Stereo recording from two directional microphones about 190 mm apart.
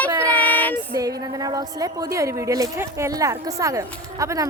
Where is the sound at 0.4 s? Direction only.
10° left (ahead or behind).